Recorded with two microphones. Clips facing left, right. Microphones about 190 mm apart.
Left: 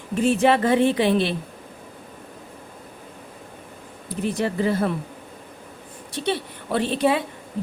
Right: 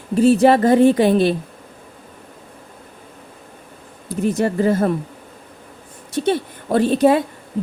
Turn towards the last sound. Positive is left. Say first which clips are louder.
# right 7 dB
turn(degrees=-45)  # may be behind; listen again after turning